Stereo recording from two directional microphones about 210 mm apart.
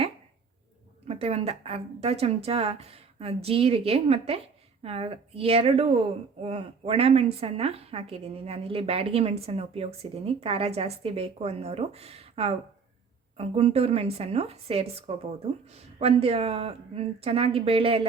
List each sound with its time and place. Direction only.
1.0 s speech: 30° right (ahead or behind)